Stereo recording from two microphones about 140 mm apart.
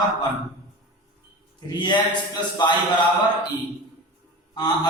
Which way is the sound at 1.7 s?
30° left (ahead or behind).